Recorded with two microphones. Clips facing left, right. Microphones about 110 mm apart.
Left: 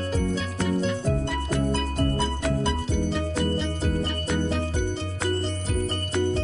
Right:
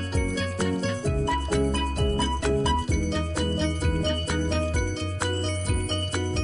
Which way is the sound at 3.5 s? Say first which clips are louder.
Even; centre (ahead or behind).